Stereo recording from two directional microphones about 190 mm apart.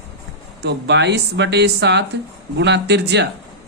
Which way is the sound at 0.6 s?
65° right (ahead or behind).